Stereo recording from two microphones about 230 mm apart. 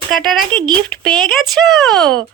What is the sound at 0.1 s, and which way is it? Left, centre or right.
Speech, centre.